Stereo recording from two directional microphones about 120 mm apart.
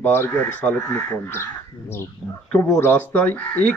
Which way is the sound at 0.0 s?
15° left (ahead or behind).